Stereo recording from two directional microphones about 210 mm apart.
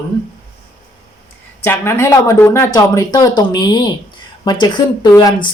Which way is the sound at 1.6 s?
10° left (ahead or behind).